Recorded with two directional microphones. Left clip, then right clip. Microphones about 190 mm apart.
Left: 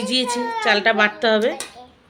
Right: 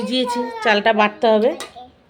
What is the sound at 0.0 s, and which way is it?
Speech, 15° right (ahead or behind).